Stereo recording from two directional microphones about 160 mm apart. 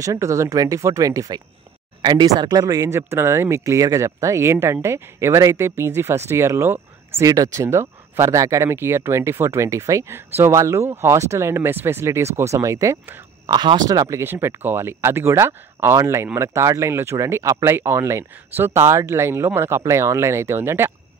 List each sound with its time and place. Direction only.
0.0 s speech: 20° right (ahead or behind)